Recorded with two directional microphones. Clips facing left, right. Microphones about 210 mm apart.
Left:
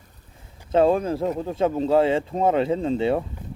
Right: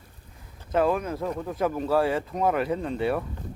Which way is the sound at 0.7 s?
30° left (ahead or behind).